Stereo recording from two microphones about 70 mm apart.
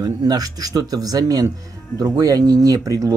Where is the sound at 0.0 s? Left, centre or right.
Right.